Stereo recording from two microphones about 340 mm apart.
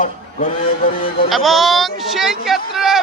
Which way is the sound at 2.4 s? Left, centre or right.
Centre.